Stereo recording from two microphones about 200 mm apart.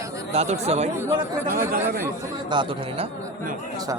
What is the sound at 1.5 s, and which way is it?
Speech, 45° right (ahead or behind).